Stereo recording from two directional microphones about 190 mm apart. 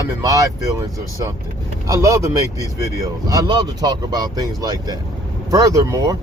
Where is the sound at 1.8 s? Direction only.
15° right (ahead or behind).